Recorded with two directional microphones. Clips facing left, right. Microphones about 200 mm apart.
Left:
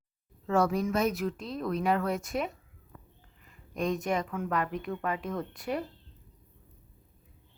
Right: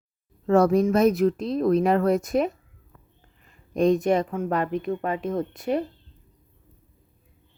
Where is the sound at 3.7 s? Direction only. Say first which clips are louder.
Right 10 dB; 30° right (ahead or behind).